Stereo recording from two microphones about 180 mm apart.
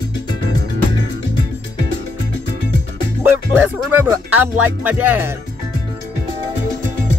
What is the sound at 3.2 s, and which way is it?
Music, 10° right (ahead or behind).